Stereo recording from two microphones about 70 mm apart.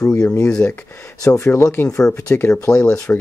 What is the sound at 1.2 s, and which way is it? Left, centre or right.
Speech, left.